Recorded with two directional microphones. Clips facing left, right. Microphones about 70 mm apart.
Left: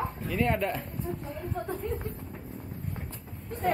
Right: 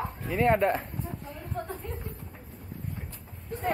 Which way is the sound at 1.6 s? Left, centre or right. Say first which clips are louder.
Right 1 dB; centre.